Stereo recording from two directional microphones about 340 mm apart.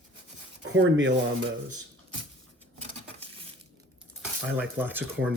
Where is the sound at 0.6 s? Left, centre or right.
Right.